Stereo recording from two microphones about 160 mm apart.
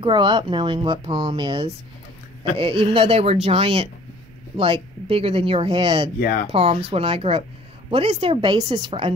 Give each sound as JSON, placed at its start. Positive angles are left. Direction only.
{"t": 0.0, "sound": "speech", "side_deg": -30}
{"t": 6.1, "sound": "speech", "side_deg": 60}
{"t": 6.5, "sound": "speech", "side_deg": -35}